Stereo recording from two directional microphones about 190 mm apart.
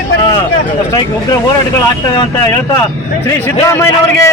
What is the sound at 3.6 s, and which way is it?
Speech, 15° left (ahead or behind).